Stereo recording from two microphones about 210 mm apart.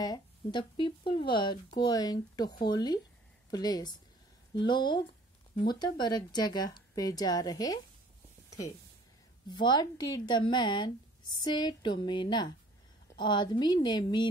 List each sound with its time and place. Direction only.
0.0 s a woman's voice: 20° left (ahead or behind)
8.5 s a sound: 15° left (ahead or behind)
9.5 s speech: 20° left (ahead or behind)